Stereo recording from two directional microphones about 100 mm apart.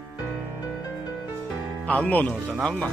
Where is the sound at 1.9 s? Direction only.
15° left (ahead or behind).